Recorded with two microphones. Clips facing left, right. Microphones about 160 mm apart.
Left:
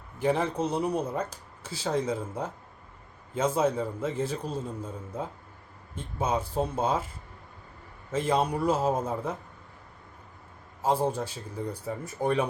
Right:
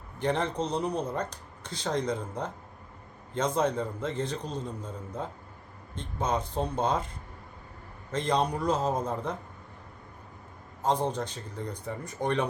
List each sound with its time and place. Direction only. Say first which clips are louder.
0.2 s speech: left 2 dB; 5° left (ahead or behind)
8.1 s speech: left 1 dB; 5° left (ahead or behind)
10.8 s speech: left 1 dB; 10° left (ahead or behind)